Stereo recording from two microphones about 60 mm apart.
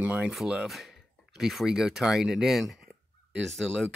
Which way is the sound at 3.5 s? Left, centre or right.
Centre.